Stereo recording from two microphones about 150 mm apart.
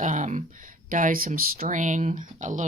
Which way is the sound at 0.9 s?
65° right (ahead or behind).